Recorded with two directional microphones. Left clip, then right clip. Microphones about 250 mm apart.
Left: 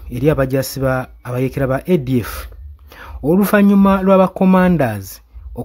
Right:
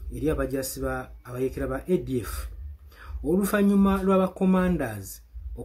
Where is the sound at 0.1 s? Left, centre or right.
Left.